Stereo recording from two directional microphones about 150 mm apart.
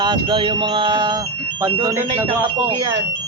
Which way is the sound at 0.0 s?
30° right (ahead or behind).